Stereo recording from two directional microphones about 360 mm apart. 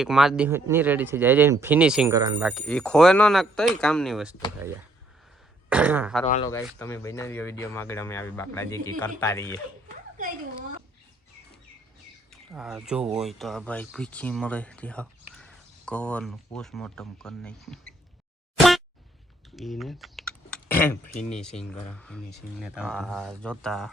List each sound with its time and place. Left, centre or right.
0.0 s speech: centre
5.6 s speech: centre
6.2 s speech: left
6.7 s a man's voice: centre
12.3 s speech: centre
19.5 s typing: centre
21.1 s a man's voice: centre
21.6 s speech: centre